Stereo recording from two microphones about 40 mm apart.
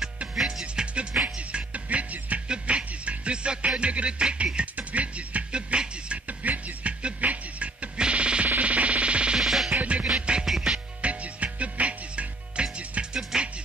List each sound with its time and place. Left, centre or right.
0.7 s music: right
2.4 s music: right
6.4 s music: right
9.4 s music: centre
9.7 s music: right
13.1 s music: right